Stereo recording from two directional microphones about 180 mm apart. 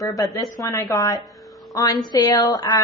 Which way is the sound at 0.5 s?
20° left (ahead or behind).